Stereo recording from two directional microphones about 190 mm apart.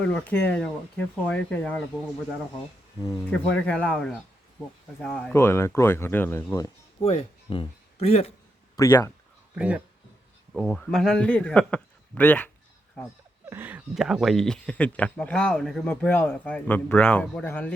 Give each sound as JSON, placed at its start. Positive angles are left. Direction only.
{"t": 0.0, "sound": "speech", "side_deg": 5}
{"t": 3.5, "sound": "a man's voice", "side_deg": 5}
{"t": 7.0, "sound": "speech", "side_deg": 30}
{"t": 8.7, "sound": "speech", "side_deg": 15}
{"t": 9.6, "sound": "speech", "side_deg": -5}
{"t": 10.5, "sound": "a man's voice", "side_deg": 5}
{"t": 13.5, "sound": "speech", "side_deg": -10}